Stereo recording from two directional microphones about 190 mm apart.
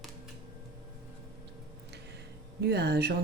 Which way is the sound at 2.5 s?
60° right (ahead or behind).